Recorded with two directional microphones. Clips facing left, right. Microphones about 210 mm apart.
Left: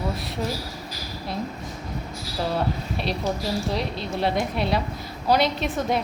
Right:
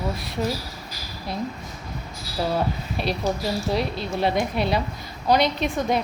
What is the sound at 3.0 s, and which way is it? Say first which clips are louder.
A woman's voice: right 3 dB; centre (ahead or behind).